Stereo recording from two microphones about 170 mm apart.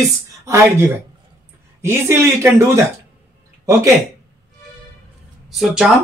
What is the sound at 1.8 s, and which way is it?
Speech, 15° right (ahead or behind).